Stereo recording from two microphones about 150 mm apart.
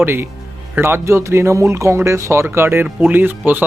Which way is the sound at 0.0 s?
15° right (ahead or behind).